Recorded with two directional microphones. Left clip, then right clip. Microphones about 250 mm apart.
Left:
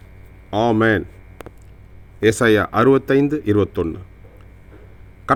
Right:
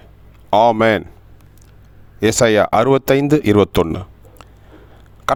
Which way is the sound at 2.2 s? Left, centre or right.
Right.